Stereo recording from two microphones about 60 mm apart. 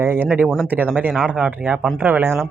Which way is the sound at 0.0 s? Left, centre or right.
Right.